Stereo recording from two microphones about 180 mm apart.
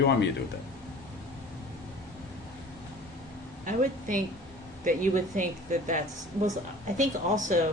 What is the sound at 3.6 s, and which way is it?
A woman's voice, 45° right (ahead or behind).